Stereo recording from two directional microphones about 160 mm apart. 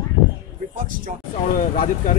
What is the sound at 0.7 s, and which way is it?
Speech, 60° right (ahead or behind).